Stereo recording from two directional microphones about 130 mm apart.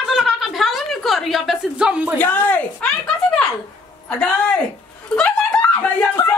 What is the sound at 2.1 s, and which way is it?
Speech, 15° left (ahead or behind).